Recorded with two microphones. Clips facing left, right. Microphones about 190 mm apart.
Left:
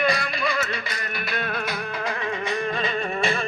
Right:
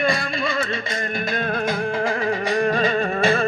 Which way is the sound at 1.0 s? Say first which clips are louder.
Right 6 dB; 45° right (ahead or behind).